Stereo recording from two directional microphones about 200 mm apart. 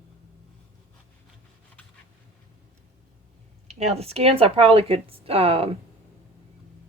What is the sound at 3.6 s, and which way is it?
Speech, 30° right (ahead or behind).